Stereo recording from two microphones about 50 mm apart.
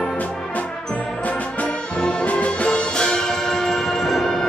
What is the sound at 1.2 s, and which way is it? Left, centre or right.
Brass instrument, left.